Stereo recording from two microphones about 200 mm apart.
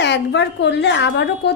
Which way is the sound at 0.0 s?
60° left (ahead or behind).